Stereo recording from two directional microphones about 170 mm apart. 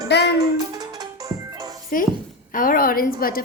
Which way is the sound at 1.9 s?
55° left (ahead or behind).